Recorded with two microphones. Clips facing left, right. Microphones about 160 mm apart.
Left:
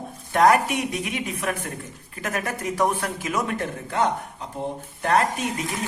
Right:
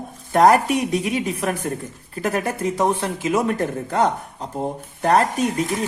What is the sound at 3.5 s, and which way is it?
Speech, 40° right (ahead or behind).